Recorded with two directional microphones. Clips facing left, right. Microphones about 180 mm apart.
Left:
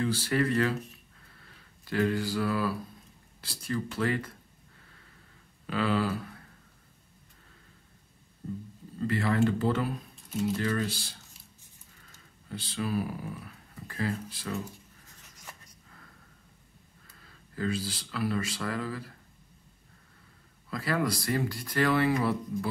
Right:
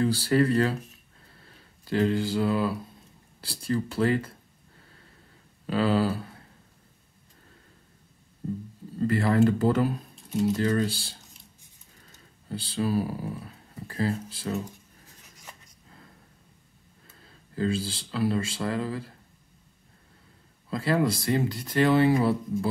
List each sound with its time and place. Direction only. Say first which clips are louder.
0.0 s speech: right 5 dB; 35° right (ahead or behind)
5.7 s speech: right 4 dB; 35° right (ahead or behind)
9.0 s speech: right 5 dB; 40° right (ahead or behind)
12.4 s speech: right 5 dB; 30° right (ahead or behind)
17.1 s speech: right 5 dB; 25° right (ahead or behind)
20.7 s speech: right 5 dB; 25° right (ahead or behind)